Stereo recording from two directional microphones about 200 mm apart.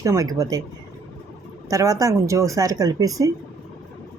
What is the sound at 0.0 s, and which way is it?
Speech, 15° right (ahead or behind).